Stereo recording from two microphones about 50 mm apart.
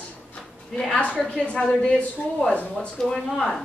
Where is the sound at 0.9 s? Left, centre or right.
Left.